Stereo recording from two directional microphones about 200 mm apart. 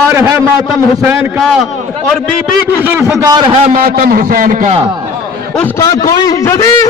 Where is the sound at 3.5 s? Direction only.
35° right (ahead or behind).